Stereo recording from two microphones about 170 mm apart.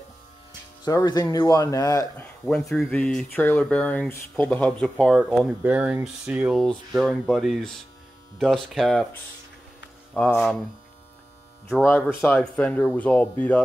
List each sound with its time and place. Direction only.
0.5 s speech: 25° left (ahead or behind)
2.2 s speech: 5° left (ahead or behind)
10.1 s speech: 10° left (ahead or behind)
11.8 s speech: 15° left (ahead or behind)